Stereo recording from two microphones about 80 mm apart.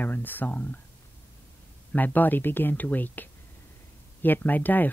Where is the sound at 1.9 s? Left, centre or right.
Left.